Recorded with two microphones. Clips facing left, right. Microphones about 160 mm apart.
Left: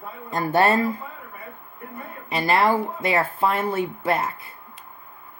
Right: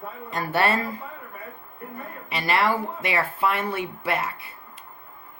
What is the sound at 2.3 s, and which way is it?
Speech, 45° left (ahead or behind).